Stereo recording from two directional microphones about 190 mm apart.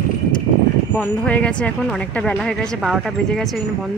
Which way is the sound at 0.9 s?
5° left (ahead or behind).